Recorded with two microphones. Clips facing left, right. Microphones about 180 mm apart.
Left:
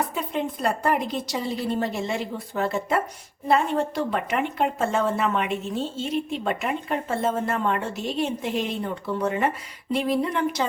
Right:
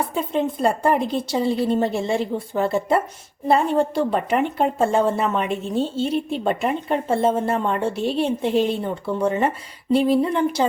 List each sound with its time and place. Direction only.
0.0 s a woman's voice: 30° right (ahead or behind)
1.5 s a woman's voice: centre (ahead or behind)
1.8 s a woman's voice: 30° right (ahead or behind)